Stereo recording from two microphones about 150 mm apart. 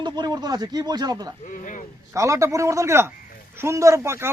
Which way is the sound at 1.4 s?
60° left (ahead or behind).